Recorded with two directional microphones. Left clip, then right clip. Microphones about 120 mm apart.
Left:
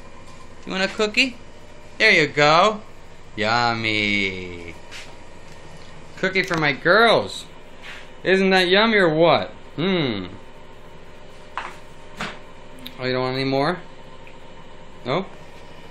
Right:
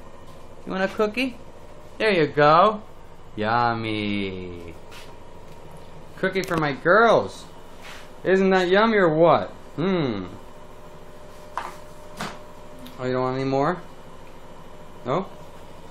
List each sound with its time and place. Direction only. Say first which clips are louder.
0.7 s a man's voice: left 1 dB; 5° right (ahead or behind)
6.2 s a man's voice: left 3 dB; 5° left (ahead or behind)
12.8 s speech: left 1 dB; 10° left (ahead or behind)